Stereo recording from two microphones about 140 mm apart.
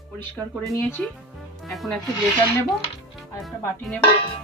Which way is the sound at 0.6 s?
5° left (ahead or behind).